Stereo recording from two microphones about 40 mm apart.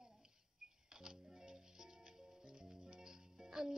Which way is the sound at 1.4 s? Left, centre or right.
Right.